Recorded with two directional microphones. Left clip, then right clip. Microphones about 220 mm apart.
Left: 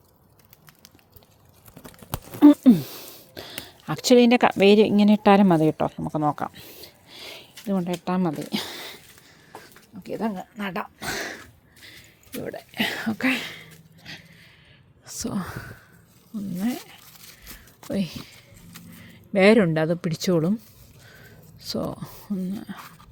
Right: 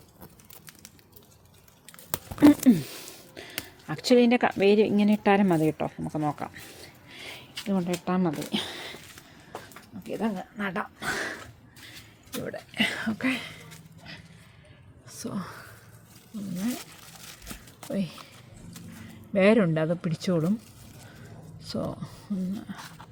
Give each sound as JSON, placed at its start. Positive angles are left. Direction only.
{"t": 2.5, "sound": "a sound", "side_deg": 25}
{"t": 3.8, "sound": "speech", "side_deg": 35}
{"t": 10.0, "sound": "speech", "side_deg": 25}
{"t": 11.9, "sound": "a sound", "side_deg": 25}
{"t": 15.0, "sound": "speech", "side_deg": 35}
{"t": 17.9, "sound": "speech", "side_deg": 35}
{"t": 21.7, "sound": "speech", "side_deg": 35}